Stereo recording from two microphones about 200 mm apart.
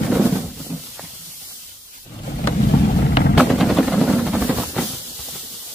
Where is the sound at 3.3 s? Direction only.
Centre (ahead or behind).